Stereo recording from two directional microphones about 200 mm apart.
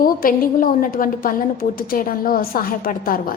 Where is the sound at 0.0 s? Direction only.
45° left (ahead or behind).